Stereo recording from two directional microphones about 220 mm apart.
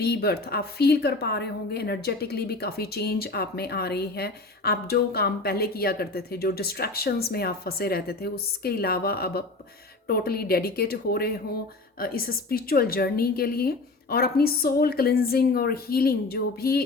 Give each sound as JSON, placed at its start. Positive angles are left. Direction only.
{"t": 0.0, "sound": "a woman's voice", "side_deg": 45}